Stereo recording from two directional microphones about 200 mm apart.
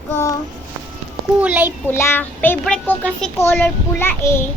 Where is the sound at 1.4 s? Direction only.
10° right (ahead or behind).